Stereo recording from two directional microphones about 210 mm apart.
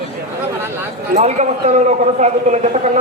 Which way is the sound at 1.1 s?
35° right (ahead or behind).